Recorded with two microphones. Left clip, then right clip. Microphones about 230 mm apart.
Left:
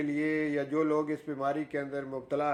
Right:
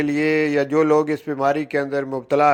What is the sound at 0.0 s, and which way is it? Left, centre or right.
A man's voice, right.